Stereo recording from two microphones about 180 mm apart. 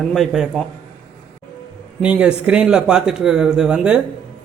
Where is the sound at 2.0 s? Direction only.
5° right (ahead or behind).